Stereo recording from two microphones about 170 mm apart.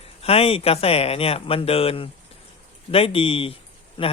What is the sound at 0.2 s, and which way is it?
Speech, 35° left (ahead or behind).